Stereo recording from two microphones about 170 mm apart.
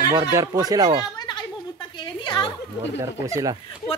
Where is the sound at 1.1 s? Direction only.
25° left (ahead or behind).